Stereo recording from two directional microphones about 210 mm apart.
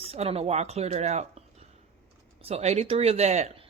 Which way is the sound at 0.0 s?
30° right (ahead or behind).